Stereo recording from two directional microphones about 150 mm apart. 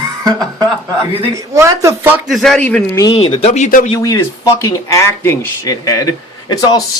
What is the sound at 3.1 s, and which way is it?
Speech, 40° left (ahead or behind).